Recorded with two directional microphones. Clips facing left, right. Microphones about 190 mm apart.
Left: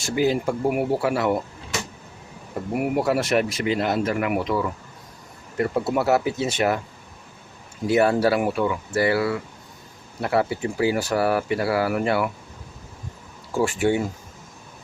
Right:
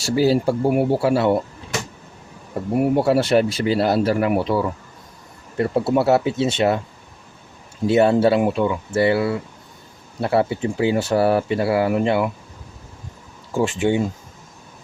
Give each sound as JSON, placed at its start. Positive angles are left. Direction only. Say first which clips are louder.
{"t": 0.0, "sound": "speech", "louder": "right 4 dB", "side_deg": -35}
{"t": 2.7, "sound": "speech", "louder": "right 5 dB", "side_deg": -30}
{"t": 7.9, "sound": "speech", "louder": "right 3 dB", "side_deg": -25}
{"t": 13.5, "sound": "speech", "louder": "right 2 dB", "side_deg": -20}